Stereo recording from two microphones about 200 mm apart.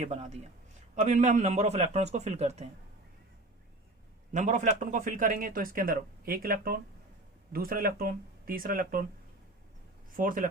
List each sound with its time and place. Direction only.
0.0 s a man's voice: 35° right (ahead or behind)
4.3 s a man's voice: 40° right (ahead or behind)
10.2 s a man's voice: 45° right (ahead or behind)